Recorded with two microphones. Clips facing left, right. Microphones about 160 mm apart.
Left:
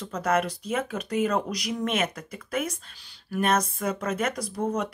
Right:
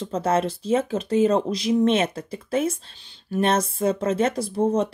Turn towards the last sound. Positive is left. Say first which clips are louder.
# right 7 dB
turn(degrees=-25)  # may be behind; listen again after turning